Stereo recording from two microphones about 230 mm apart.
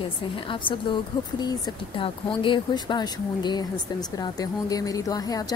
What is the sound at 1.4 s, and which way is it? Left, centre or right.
A woman's voice, centre.